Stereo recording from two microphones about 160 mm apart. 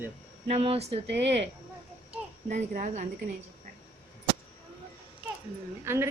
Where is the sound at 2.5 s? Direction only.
55° right (ahead or behind).